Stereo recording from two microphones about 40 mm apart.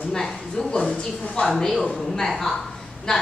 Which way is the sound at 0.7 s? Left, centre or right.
Left.